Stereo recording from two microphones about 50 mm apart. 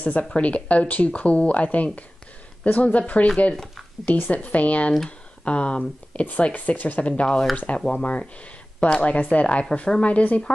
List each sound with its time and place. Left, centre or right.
0.0 s speech: left
4.3 s speech: left